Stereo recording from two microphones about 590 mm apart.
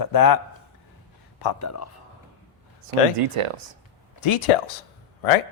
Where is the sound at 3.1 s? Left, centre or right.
Right.